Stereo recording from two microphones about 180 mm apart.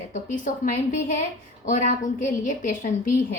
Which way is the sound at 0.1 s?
45° left (ahead or behind).